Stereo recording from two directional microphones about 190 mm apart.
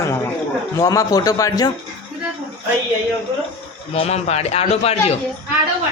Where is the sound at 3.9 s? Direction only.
35° left (ahead or behind).